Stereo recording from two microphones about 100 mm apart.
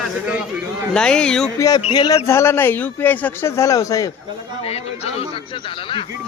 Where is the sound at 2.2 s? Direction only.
25° left (ahead or behind).